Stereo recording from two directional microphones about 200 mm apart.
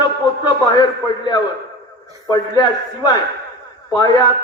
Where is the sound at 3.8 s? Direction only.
20° left (ahead or behind).